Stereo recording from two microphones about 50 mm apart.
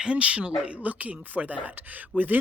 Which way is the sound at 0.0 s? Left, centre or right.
Right.